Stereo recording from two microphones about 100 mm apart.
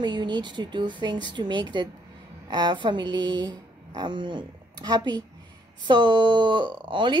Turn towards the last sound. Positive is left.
turn(degrees=-55)  # may be behind; listen again after turning